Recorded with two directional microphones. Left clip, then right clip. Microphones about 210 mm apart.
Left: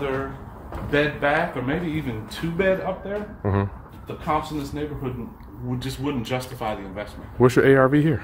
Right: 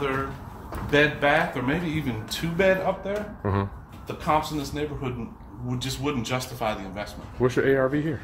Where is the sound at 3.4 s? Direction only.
20° left (ahead or behind).